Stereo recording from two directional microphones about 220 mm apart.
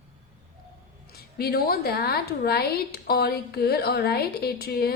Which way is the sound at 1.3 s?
45° left (ahead or behind).